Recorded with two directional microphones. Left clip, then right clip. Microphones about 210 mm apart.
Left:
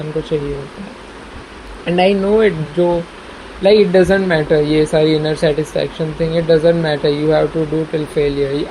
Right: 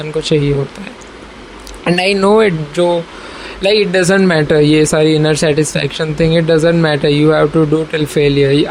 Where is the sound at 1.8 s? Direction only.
50° right (ahead or behind).